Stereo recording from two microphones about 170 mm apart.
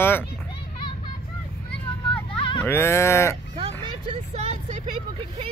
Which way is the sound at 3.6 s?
35° right (ahead or behind).